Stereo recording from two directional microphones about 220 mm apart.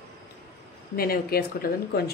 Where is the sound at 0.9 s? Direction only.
45° left (ahead or behind).